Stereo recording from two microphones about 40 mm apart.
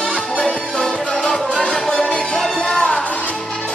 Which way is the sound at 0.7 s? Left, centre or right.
Centre.